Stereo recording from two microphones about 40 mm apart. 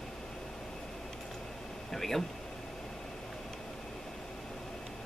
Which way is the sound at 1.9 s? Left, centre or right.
Centre.